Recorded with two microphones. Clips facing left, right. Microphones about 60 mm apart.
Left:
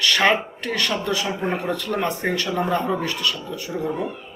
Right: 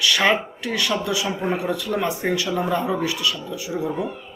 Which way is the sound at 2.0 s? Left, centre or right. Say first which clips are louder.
Even; centre.